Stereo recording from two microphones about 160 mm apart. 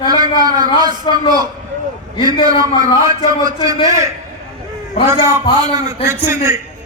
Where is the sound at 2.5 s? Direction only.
20° right (ahead or behind).